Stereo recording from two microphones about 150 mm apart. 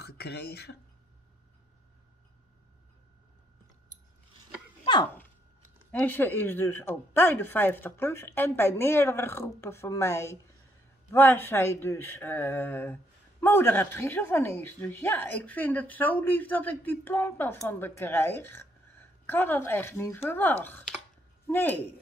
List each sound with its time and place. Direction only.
0.0 s speech: 90° left
5.9 s speech: 10° left (ahead or behind)